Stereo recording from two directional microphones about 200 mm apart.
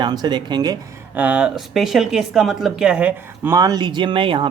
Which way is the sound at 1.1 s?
5° right (ahead or behind).